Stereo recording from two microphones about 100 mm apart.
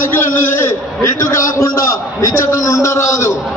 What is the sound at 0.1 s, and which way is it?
A man's voice, 25° left (ahead or behind).